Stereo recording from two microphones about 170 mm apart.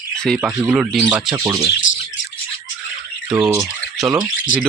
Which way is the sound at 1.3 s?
20° right (ahead or behind).